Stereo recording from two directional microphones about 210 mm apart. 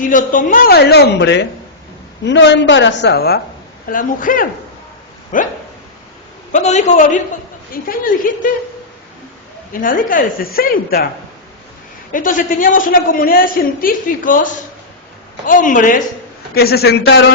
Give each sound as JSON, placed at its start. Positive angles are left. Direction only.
{"t": 0.0, "sound": "a woman's voice", "side_deg": 40}
{"t": 6.5, "sound": "a man's voice", "side_deg": 35}
{"t": 9.7, "sound": "a woman's voice", "side_deg": 40}
{"t": 12.1, "sound": "a man's voice", "side_deg": 40}